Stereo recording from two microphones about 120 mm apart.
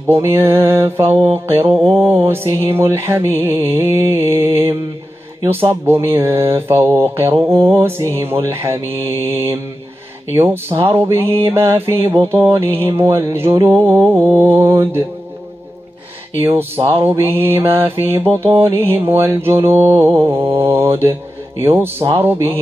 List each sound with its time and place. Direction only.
0.1 s mantra: 20° right (ahead or behind)
16.8 s mantra: 20° right (ahead or behind)